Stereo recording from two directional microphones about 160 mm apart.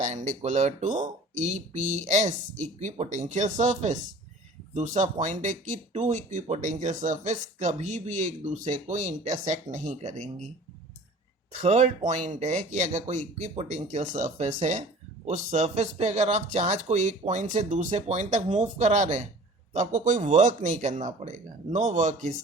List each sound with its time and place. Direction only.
0.0 s speech: 50° right (ahead or behind)
11.5 s speech: 45° right (ahead or behind)